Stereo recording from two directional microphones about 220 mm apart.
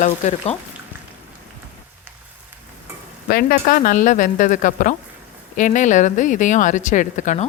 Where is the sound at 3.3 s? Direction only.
40° left (ahead or behind).